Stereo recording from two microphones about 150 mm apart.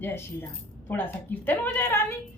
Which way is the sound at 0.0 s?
15° left (ahead or behind).